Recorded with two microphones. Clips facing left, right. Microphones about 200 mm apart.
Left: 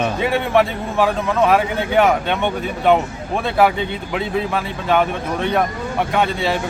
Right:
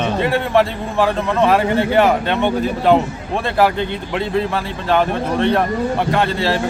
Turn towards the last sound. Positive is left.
turn(degrees=0)  # may be behind; listen again after turning